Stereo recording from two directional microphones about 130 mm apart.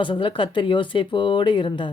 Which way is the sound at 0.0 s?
40° left (ahead or behind).